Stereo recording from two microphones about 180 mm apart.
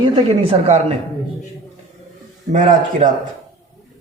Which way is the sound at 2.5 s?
45° right (ahead or behind).